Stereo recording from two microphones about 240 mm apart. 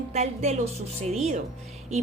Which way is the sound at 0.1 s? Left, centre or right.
Right.